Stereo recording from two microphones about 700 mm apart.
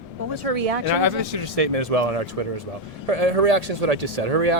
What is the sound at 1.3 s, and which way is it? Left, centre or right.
Speech, right.